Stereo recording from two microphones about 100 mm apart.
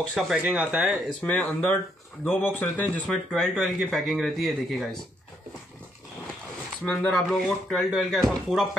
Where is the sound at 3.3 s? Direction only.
Centre (ahead or behind).